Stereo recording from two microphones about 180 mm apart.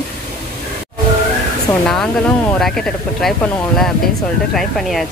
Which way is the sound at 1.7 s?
20° left (ahead or behind).